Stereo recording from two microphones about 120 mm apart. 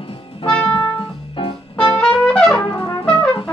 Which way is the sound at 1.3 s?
45° left (ahead or behind).